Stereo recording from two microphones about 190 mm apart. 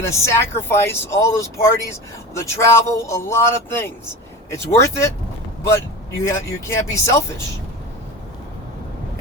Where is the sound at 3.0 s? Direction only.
15° left (ahead or behind).